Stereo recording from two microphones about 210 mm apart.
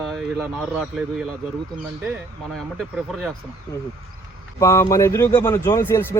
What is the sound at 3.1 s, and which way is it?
Speech, centre (ahead or behind).